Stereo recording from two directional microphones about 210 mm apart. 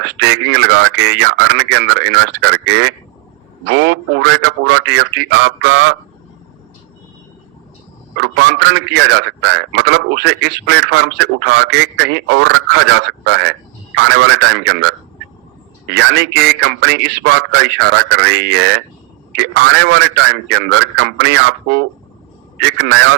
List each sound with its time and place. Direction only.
0.0 s a man's voice: 55° right (ahead or behind)
8.2 s a man's voice: 55° right (ahead or behind)